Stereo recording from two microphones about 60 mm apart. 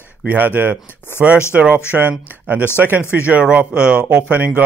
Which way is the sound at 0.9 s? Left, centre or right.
Left.